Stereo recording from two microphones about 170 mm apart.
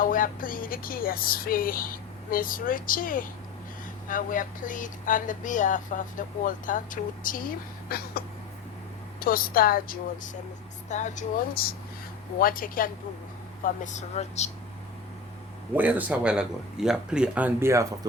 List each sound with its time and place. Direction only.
0.0 s speech: 55° left (ahead or behind)
7.9 s speech: 65° left (ahead or behind)
9.2 s speech: 60° left (ahead or behind)
10.8 s speech: 45° left (ahead or behind)
13.8 s speech: 45° left (ahead or behind)
15.7 s speech: 10° right (ahead or behind)